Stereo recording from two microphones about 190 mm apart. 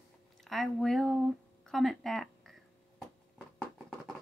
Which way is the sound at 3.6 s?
Centre (ahead or behind).